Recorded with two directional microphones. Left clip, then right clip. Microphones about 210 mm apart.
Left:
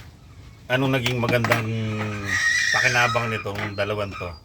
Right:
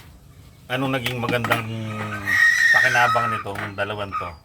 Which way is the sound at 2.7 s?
5° left (ahead or behind).